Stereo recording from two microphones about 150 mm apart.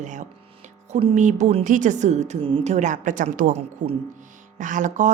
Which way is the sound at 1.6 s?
60° right (ahead or behind).